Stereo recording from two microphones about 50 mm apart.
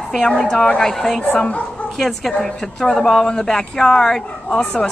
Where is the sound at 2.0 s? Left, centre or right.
Centre.